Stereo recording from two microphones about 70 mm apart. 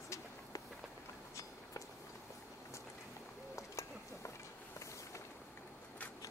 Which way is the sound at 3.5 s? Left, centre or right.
Left.